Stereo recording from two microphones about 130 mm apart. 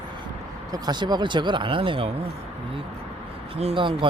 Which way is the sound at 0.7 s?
35° right (ahead or behind).